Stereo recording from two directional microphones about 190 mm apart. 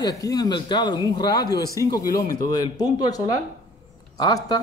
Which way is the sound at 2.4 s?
20° left (ahead or behind).